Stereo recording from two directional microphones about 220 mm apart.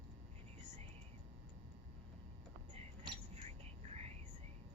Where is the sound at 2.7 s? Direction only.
30° right (ahead or behind).